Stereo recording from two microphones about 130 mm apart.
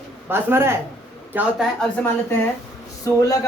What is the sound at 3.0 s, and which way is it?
Speech, 25° left (ahead or behind).